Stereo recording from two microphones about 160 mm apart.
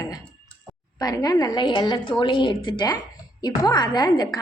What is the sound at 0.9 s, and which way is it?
A woman's voice, 25° left (ahead or behind).